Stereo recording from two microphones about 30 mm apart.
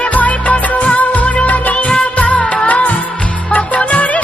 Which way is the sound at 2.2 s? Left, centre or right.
Left.